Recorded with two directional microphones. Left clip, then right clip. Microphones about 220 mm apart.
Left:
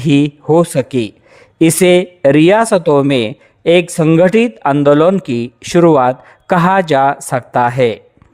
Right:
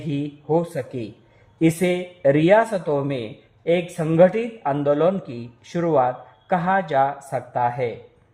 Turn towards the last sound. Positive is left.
turn(degrees=45)  # may be behind; listen again after turning